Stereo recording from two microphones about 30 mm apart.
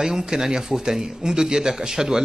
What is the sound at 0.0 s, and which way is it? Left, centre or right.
A man's voice, centre.